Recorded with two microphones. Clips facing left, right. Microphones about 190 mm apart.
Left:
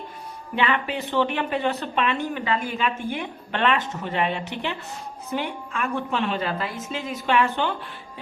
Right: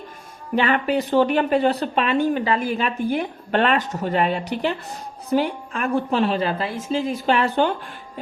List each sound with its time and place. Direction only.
0.5 s speech: 40° right (ahead or behind)